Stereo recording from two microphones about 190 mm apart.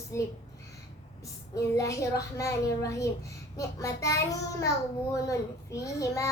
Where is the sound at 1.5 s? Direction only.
15° left (ahead or behind).